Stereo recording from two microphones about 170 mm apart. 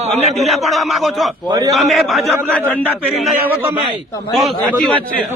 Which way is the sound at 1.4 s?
25° right (ahead or behind).